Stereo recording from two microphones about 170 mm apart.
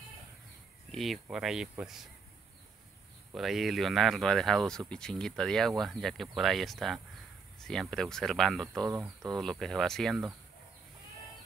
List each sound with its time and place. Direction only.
0.9 s speech: centre (ahead or behind)
3.3 s speech: centre (ahead or behind)
8.8 s speech: 20° right (ahead or behind)
9.4 s speech: 5° left (ahead or behind)